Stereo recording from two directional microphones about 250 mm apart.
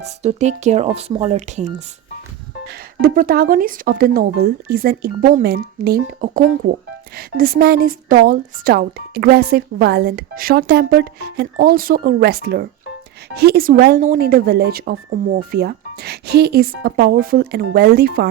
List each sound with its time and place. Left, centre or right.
0.0 s speech: right
3.0 s speech: right